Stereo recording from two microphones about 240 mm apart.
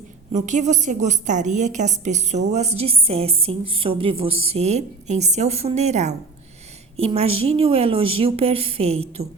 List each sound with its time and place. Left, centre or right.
0.3 s a woman's voice: right